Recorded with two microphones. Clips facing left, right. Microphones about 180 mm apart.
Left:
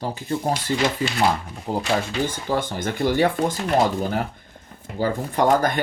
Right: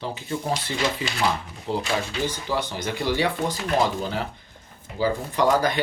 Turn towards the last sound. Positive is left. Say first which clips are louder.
# left 2 dB
turn(degrees=50)  # may be behind; listen again after turning